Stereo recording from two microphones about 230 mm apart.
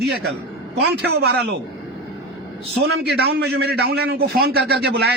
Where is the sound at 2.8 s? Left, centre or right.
Right.